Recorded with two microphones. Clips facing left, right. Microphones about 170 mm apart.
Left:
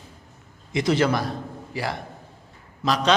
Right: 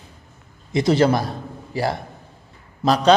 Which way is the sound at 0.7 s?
35° right (ahead or behind).